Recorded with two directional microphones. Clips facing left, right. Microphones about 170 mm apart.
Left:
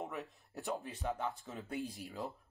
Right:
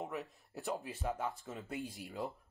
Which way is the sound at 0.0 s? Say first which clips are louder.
Right 1 dB; centre (ahead or behind).